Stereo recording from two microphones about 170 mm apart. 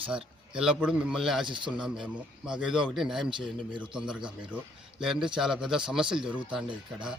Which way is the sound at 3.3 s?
30° right (ahead or behind).